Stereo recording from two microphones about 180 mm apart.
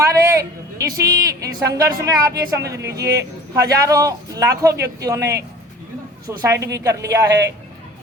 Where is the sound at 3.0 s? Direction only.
20° right (ahead or behind).